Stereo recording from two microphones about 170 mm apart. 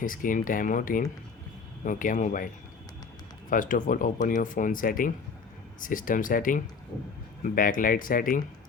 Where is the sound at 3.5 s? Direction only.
50° left (ahead or behind).